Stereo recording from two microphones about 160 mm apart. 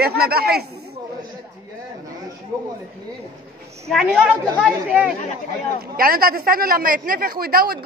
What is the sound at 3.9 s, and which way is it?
Speech, centre (ahead or behind).